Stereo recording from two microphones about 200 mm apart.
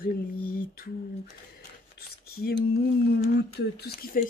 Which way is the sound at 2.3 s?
50° left (ahead or behind).